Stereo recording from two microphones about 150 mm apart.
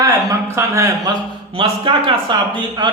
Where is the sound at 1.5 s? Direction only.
35° right (ahead or behind).